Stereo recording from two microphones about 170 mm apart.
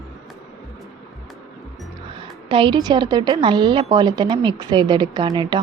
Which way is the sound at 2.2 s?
30° right (ahead or behind).